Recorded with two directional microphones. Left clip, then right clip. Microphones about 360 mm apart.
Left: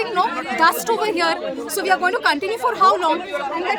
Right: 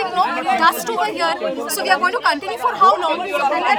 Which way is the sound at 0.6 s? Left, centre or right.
Centre.